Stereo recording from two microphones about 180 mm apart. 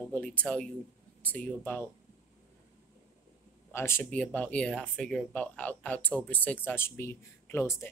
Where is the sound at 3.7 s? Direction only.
15° left (ahead or behind).